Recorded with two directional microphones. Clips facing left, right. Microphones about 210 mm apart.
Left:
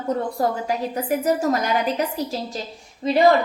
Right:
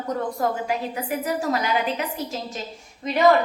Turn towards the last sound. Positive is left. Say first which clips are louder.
# left 6 dB
turn(degrees=30)  # may be behind; listen again after turning